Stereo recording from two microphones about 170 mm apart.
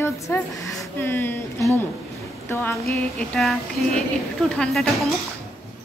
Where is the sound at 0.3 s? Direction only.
15° left (ahead or behind).